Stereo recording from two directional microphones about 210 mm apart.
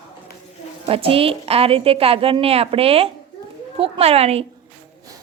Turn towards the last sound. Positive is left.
turn(degrees=-30)  # may be behind; listen again after turning